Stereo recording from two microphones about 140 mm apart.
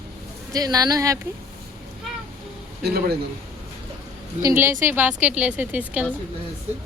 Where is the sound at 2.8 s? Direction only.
90° right.